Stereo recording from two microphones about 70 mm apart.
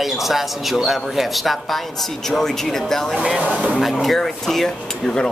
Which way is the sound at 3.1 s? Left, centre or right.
Centre.